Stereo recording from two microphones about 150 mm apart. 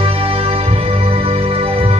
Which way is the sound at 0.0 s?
40° right (ahead or behind).